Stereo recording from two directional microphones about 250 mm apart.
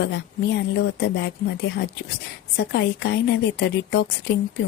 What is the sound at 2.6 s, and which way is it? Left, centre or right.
Speech, left.